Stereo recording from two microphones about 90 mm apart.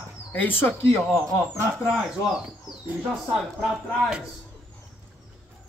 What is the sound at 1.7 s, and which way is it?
Speech, centre (ahead or behind).